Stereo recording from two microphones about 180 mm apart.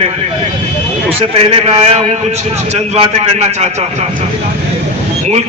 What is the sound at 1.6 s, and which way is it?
Speech, 35° right (ahead or behind).